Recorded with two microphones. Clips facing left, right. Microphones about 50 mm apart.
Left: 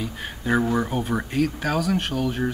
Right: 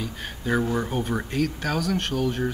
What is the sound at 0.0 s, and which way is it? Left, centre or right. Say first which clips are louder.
Speech: left 2 dB; centre.